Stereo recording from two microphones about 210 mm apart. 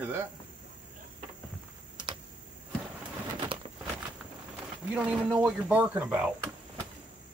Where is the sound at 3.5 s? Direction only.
25° right (ahead or behind).